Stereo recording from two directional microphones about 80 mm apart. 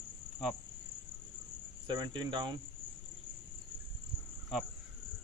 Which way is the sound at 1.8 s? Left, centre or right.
Right.